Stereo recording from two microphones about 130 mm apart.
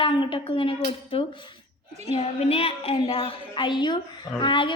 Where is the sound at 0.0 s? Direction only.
40° left (ahead or behind).